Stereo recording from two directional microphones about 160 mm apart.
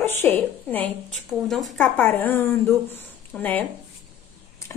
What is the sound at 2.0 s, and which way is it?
A woman's voice, 10° left (ahead or behind).